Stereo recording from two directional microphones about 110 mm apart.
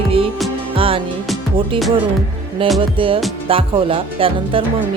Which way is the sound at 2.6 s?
55° right (ahead or behind).